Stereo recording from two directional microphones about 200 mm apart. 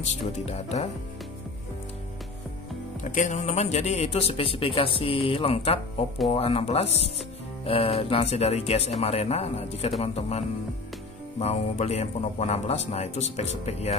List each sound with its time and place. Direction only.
0.0 s speech: 35° left (ahead or behind)
3.0 s a man's voice: 40° left (ahead or behind)